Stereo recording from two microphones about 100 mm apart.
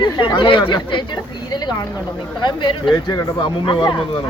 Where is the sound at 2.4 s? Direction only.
50° left (ahead or behind).